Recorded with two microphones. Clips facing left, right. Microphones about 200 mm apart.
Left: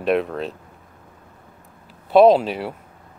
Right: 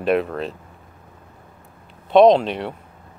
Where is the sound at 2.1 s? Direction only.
5° left (ahead or behind).